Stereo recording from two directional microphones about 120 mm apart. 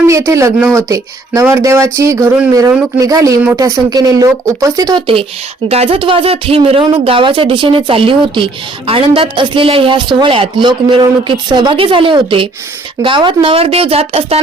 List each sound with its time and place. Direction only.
0.1 s speech: 25° right (ahead or behind)
5.6 s a woman's voice: 55° right (ahead or behind)